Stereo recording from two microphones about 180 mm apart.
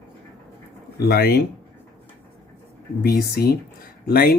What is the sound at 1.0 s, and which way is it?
Speech, 60° left (ahead or behind).